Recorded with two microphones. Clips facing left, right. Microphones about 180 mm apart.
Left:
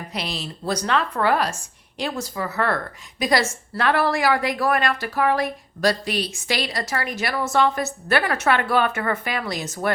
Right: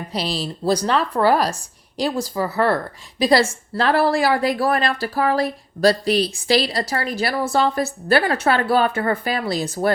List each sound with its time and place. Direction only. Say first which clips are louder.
0.1 s a woman's voice: right 7 dB; 35° right (ahead or behind)